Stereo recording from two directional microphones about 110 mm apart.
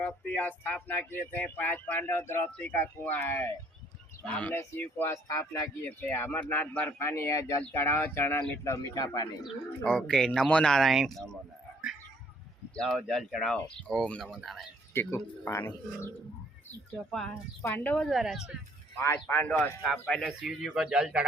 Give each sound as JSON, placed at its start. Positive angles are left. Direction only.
{"t": 0.3, "sound": "speech", "side_deg": 15}
{"t": 9.8, "sound": "speech", "side_deg": 5}
{"t": 12.7, "sound": "speech", "side_deg": 5}
{"t": 14.9, "sound": "speech", "side_deg": 20}
{"t": 17.1, "sound": "speech", "side_deg": 5}
{"t": 18.9, "sound": "speech", "side_deg": 25}